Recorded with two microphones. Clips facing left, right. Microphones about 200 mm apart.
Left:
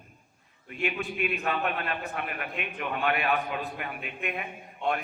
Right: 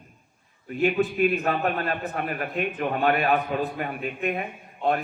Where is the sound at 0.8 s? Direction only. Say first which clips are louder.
Right 9 dB; 40° right (ahead or behind).